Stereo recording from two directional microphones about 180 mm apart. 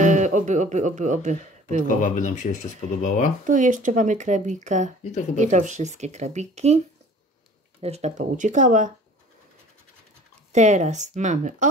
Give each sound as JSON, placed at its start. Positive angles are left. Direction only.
{"t": 0.0, "sound": "speech", "side_deg": -40}
{"t": 1.9, "sound": "speech", "side_deg": 45}
{"t": 3.4, "sound": "speech", "side_deg": -45}
{"t": 7.8, "sound": "speech", "side_deg": -35}
{"t": 10.5, "sound": "speech", "side_deg": -40}